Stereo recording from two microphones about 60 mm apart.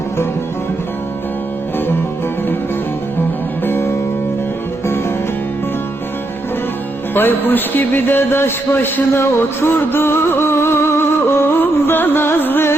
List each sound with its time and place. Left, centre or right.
3.6 s music: left
7.1 s a man's voice: left